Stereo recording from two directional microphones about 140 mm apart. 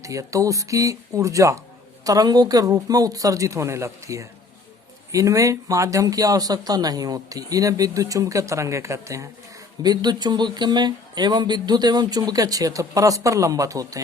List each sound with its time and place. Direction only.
0.0 s speech: 25° right (ahead or behind)